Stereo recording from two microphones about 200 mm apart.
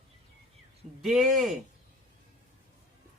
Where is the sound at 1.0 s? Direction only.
Centre (ahead or behind).